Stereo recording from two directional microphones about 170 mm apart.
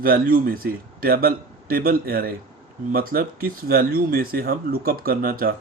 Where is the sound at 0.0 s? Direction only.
60° right (ahead or behind).